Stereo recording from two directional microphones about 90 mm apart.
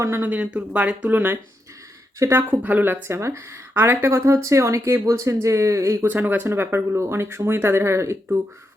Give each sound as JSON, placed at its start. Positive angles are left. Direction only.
{"t": 0.0, "sound": "speech", "side_deg": -25}
{"t": 2.6, "sound": "speech", "side_deg": -20}
{"t": 6.1, "sound": "speech", "side_deg": -20}